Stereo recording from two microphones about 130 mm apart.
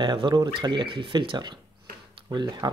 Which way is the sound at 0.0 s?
35° right (ahead or behind).